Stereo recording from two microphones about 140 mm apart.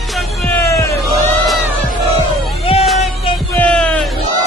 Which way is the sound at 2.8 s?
Centre (ahead or behind).